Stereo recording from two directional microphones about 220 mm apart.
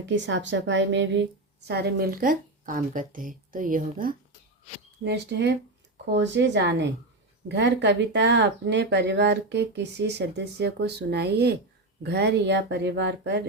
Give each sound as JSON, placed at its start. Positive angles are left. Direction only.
{"t": 0.0, "sound": "a woman's voice", "side_deg": -55}
{"t": 5.0, "sound": "speech", "side_deg": -50}